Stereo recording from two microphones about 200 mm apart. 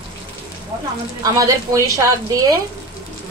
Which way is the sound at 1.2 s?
15° right (ahead or behind).